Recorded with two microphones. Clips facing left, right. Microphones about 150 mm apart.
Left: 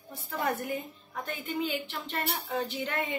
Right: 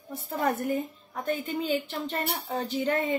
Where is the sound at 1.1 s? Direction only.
40° right (ahead or behind).